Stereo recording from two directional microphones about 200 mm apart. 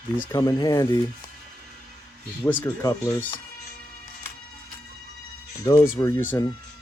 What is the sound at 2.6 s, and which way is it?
Speech, 15° left (ahead or behind).